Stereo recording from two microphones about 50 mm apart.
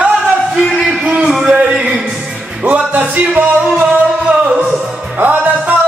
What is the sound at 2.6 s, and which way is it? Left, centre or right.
Music, right.